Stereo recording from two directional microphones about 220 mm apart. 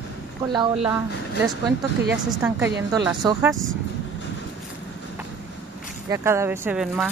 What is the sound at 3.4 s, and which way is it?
Speech, centre (ahead or behind).